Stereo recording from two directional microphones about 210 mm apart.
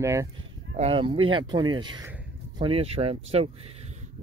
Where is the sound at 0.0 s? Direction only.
15° right (ahead or behind).